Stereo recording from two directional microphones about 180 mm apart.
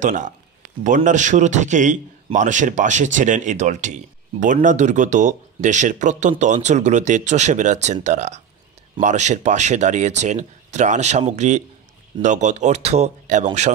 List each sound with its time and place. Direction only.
0.0 s a man's voice: 45° right (ahead or behind)